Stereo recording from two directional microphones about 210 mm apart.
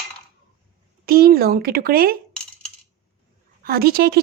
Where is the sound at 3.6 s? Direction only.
45° right (ahead or behind).